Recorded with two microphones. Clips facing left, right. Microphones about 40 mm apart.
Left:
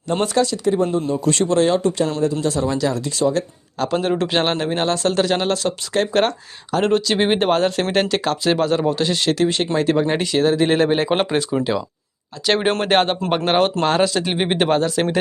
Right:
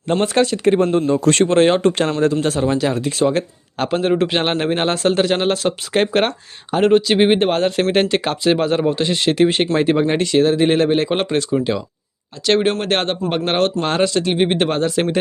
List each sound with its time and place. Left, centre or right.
0.3 s speech: right
1.3 s speech: right
1.9 s speech: right
2.6 s speech: right
4.0 s speech: centre
4.5 s speech: right
7.3 s speech: centre
7.9 s speech: centre
9.3 s speech: right
10.3 s speech: centre